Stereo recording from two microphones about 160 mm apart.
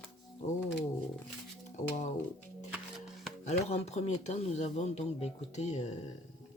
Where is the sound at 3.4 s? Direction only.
45° left (ahead or behind).